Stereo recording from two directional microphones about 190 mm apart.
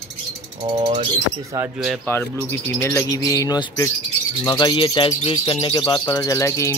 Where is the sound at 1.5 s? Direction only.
5° right (ahead or behind).